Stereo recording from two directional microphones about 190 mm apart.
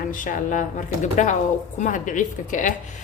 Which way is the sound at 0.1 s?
45° left (ahead or behind).